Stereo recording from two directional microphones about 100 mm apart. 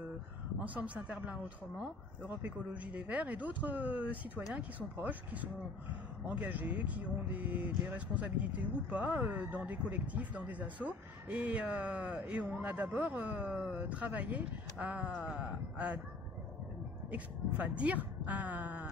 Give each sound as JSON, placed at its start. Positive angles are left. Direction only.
{"t": 0.6, "sound": "speech", "side_deg": -15}
{"t": 17.1, "sound": "speech", "side_deg": -15}